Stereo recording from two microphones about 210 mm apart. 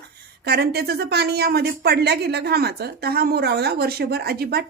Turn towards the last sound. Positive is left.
turn(degrees=-50)  # may be behind; listen again after turning